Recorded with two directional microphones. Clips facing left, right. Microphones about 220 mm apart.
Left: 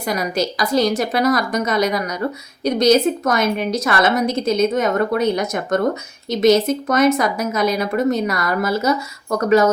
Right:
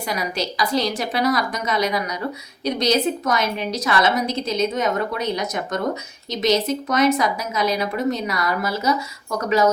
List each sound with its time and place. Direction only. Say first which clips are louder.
0.1 s a woman's voice: left 6 dB; 45° left (ahead or behind)